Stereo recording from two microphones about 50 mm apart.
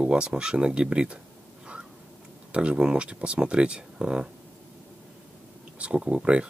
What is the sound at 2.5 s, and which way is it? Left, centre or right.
Speech, right.